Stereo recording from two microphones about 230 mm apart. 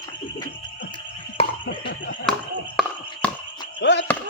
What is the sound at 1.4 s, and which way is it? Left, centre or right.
Music, left.